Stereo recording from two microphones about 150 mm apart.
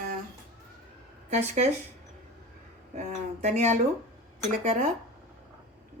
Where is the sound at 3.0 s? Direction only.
50° right (ahead or behind).